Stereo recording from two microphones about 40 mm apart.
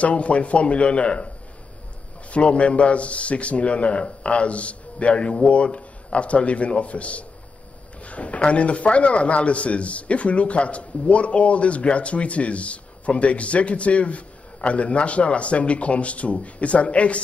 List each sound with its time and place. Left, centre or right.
0.0 s a man's voice: left
2.3 s a man's voice: left